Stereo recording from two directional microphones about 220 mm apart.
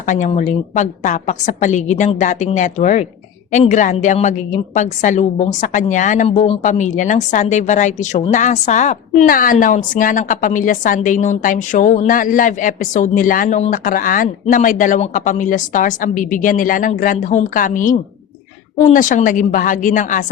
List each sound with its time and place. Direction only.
0.0 s a woman's voice: 35° left (ahead or behind)